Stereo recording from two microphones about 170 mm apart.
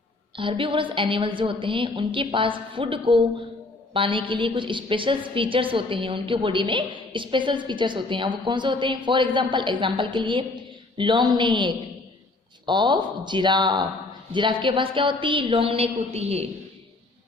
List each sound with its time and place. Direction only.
0.3 s a woman's voice: 30° right (ahead or behind)